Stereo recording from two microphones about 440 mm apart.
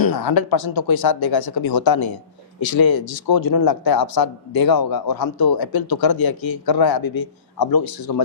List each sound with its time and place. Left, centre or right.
0.0 s speech: left